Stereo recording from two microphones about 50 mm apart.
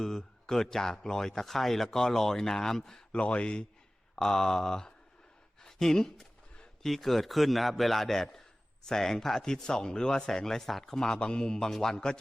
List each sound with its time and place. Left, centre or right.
0.0 s speech: centre
3.1 s speech: left
4.1 s a man's voice: centre